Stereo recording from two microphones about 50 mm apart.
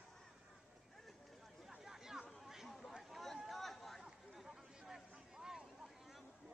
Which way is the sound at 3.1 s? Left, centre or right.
Centre.